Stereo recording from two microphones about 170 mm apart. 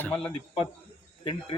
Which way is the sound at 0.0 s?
10° left (ahead or behind).